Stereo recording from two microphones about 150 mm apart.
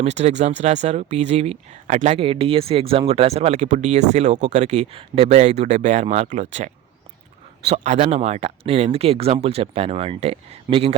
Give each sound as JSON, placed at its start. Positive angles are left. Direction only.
{"t": 0.0, "sound": "speech", "side_deg": -50}
{"t": 2.1, "sound": "speech", "side_deg": -40}
{"t": 7.7, "sound": "speech", "side_deg": -40}